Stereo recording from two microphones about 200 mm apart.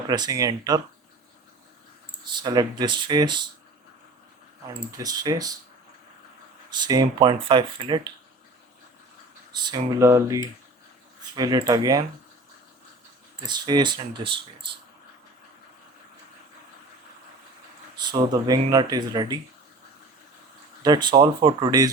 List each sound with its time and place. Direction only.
0.1 s speech: 20° right (ahead or behind)
2.4 s speech: 20° right (ahead or behind)
4.9 s speech: 15° right (ahead or behind)
6.7 s speech: 20° right (ahead or behind)
9.5 s speech: 20° right (ahead or behind)
13.5 s speech: 20° right (ahead or behind)
17.9 s speech: 20° right (ahead or behind)
20.8 s speech: 20° right (ahead or behind)